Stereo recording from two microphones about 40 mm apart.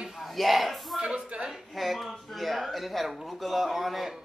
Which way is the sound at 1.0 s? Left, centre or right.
Right.